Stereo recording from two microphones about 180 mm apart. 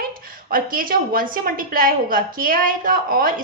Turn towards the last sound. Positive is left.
turn(degrees=-50)  # may be behind; listen again after turning